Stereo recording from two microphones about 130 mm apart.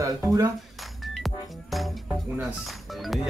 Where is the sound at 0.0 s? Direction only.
25° right (ahead or behind).